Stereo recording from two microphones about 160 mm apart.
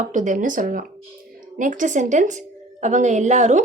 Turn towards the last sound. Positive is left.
turn(degrees=-50)  # may be behind; listen again after turning